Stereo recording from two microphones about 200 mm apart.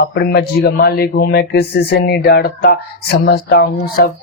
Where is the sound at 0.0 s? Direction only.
55° left (ahead or behind).